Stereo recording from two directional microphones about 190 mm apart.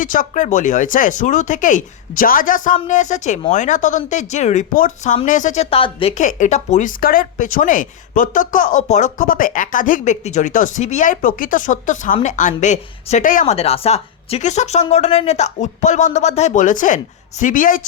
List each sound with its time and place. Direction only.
0.0 s speech: 45° left (ahead or behind)